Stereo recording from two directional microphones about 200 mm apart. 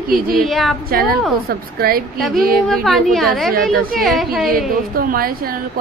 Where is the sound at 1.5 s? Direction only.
50° right (ahead or behind).